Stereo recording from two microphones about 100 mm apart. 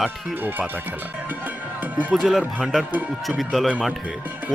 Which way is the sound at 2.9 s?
15° right (ahead or behind).